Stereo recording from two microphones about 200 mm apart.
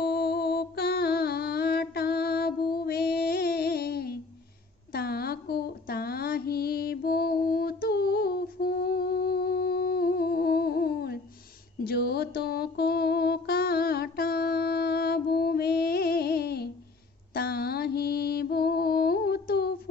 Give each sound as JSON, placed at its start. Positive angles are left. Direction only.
{"t": 0.0, "sound": "music", "side_deg": 50}
{"t": 4.9, "sound": "a sound", "side_deg": 50}
{"t": 11.8, "sound": "humming", "side_deg": 50}
{"t": 17.3, "sound": "mantra", "side_deg": 50}